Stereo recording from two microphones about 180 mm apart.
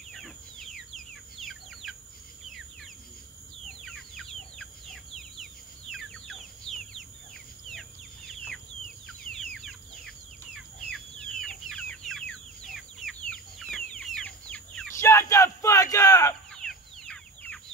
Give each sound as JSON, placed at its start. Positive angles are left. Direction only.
{"t": 0.1, "sound": "a sound", "side_deg": 0}
{"t": 2.4, "sound": "bird", "side_deg": 0}
{"t": 3.6, "sound": "chicken", "side_deg": 0}
{"t": 5.1, "sound": "a sound", "side_deg": 0}
{"t": 9.0, "sound": "bird", "side_deg": 5}
{"t": 16.5, "sound": "chicken", "side_deg": 5}